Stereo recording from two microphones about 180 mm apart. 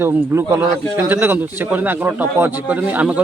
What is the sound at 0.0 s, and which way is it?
A man's voice, 15° right (ahead or behind).